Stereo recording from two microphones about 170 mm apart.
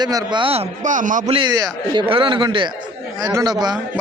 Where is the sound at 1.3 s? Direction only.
25° right (ahead or behind).